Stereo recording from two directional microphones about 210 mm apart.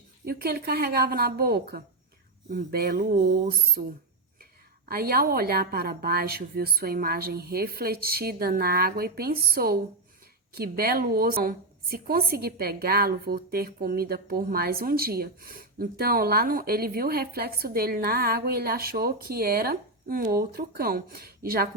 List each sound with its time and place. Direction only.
0.3 s a woman's voice: 45° right (ahead or behind)
4.9 s a woman's voice: 45° right (ahead or behind)